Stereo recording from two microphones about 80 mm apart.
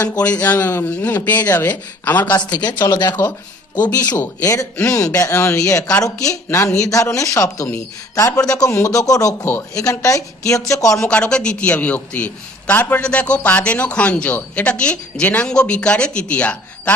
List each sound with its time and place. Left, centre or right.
0.2 s speech: centre
2.2 s speech: left
2.5 s speech: left
4.2 s speech: left
9.4 s speech: left
11.1 s a man's voice: centre